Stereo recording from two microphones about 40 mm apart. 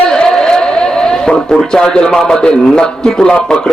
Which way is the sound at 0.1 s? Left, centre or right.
Centre.